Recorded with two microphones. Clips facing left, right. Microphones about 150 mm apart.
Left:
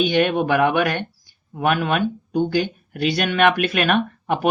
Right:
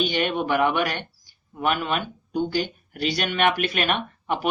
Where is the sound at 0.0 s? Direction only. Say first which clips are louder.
Left 6 dB; 50° left (ahead or behind).